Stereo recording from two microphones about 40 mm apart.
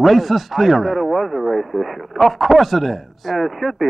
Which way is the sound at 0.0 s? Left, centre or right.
Centre.